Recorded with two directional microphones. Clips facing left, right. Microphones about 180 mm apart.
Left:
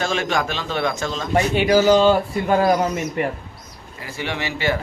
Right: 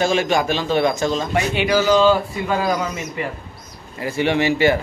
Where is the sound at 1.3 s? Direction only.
45° left (ahead or behind).